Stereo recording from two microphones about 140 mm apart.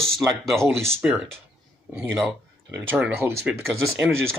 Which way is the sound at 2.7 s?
15° right (ahead or behind).